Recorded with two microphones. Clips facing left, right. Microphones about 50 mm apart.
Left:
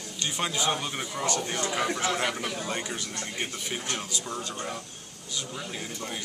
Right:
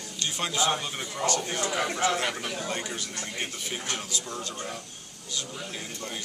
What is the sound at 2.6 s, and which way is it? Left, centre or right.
A man's voice, centre.